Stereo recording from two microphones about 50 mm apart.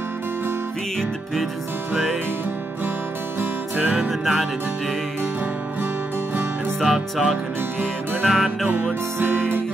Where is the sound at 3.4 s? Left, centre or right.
Right.